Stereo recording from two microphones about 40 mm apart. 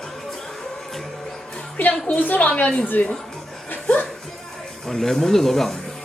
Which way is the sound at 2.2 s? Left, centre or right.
Left.